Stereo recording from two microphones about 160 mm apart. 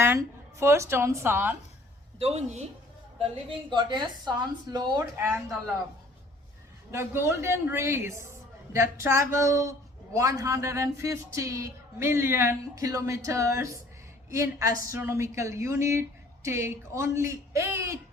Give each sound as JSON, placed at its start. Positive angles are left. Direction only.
{"t": 0.0, "sound": "a woman's voice", "side_deg": -15}
{"t": 2.1, "sound": "a woman's voice", "side_deg": -40}
{"t": 3.7, "sound": "speech", "side_deg": -30}
{"t": 5.1, "sound": "a woman's voice", "side_deg": -15}
{"t": 6.9, "sound": "a woman's voice", "side_deg": -15}